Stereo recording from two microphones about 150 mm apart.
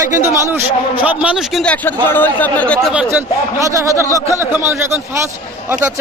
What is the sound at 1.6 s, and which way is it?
Speech, 10° left (ahead or behind).